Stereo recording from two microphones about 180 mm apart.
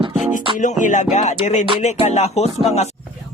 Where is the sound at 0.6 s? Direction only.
45° left (ahead or behind).